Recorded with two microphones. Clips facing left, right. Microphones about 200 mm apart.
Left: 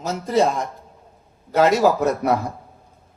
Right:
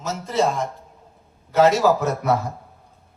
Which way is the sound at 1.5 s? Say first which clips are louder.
Even; 40° left (ahead or behind).